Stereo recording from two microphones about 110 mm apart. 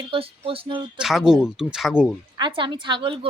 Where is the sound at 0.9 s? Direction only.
5° right (ahead or behind).